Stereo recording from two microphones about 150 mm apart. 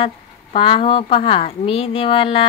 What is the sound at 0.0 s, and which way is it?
A woman's voice, 35° left (ahead or behind).